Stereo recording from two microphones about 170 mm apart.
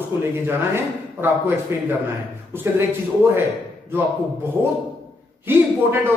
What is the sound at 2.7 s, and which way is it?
Speech, 15° right (ahead or behind).